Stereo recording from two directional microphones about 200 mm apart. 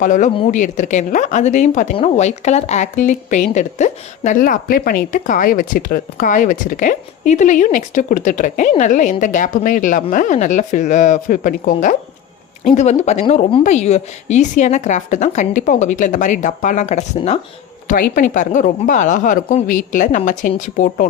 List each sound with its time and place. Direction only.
0.0 s speech: 40° left (ahead or behind)
17.8 s speech: 45° left (ahead or behind)